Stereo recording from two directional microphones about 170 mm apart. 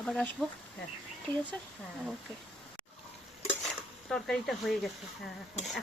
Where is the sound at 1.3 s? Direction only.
25° right (ahead or behind).